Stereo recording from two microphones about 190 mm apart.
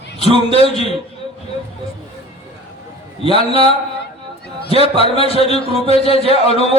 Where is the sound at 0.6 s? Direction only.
30° left (ahead or behind).